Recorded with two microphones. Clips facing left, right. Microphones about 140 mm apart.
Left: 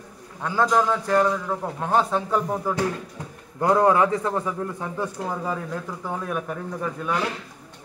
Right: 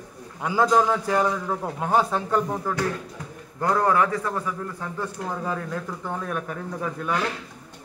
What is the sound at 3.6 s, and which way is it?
A man's voice, 20° left (ahead or behind).